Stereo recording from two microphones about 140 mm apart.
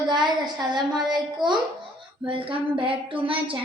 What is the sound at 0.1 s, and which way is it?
A child's voice, 30° right (ahead or behind).